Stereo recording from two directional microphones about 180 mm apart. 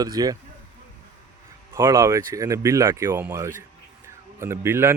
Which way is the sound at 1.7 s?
15° right (ahead or behind).